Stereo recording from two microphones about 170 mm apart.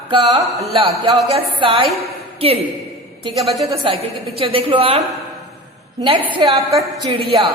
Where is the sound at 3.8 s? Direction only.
35° right (ahead or behind).